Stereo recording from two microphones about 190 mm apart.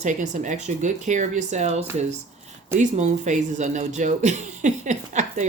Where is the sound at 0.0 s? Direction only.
40° right (ahead or behind).